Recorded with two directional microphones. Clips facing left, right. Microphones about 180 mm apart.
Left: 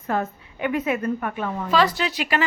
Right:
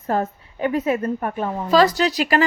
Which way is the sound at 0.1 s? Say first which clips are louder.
Right 3 dB; 35° right (ahead or behind).